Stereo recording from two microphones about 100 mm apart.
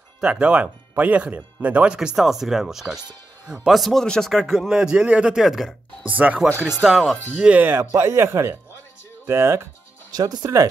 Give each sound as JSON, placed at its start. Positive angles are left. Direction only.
{"t": 0.2, "sound": "a man's voice", "side_deg": -10}
{"t": 6.0, "sound": "speech", "side_deg": -15}
{"t": 6.8, "sound": "a man's voice", "side_deg": 0}
{"t": 7.3, "sound": "speech", "side_deg": -15}
{"t": 10.1, "sound": "speech", "side_deg": -45}